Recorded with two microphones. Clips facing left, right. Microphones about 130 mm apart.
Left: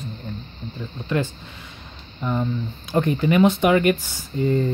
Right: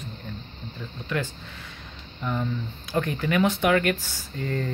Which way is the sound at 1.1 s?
25° left (ahead or behind).